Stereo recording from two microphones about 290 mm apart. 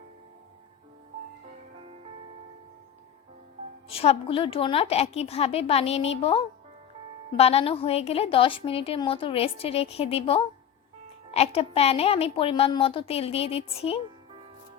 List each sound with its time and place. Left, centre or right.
3.8 s a woman's voice: centre